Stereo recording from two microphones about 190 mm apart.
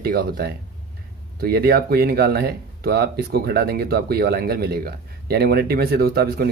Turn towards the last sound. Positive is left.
turn(degrees=-55)  # may be behind; listen again after turning